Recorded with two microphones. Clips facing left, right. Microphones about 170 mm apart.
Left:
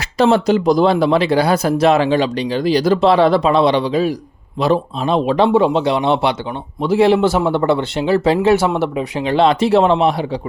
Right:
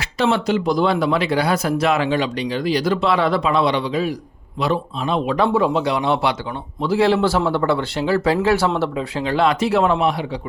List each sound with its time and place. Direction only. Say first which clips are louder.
0.2 s a man's voice: left 5 dB; 40° left (ahead or behind)